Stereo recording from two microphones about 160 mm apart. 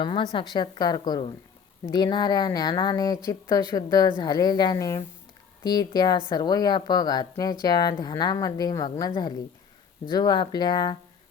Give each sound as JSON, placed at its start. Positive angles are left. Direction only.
{"t": 0.0, "sound": "a woman's voice", "side_deg": 30}